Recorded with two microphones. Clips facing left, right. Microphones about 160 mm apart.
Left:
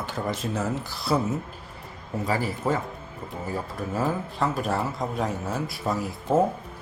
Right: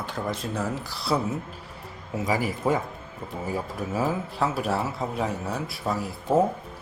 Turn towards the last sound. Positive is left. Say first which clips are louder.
# even
turn(degrees=0)  # may be behind; listen again after turning